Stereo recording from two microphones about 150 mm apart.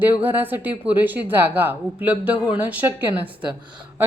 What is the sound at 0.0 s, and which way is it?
A woman's voice, 15° right (ahead or behind).